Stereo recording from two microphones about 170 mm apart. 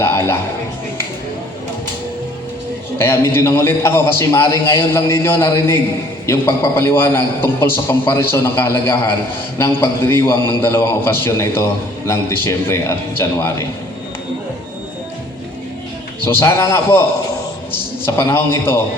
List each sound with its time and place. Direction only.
0.0 s music: 15° left (ahead or behind)
3.0 s a man's voice: 15° left (ahead or behind)
16.2 s a man's voice: 15° left (ahead or behind)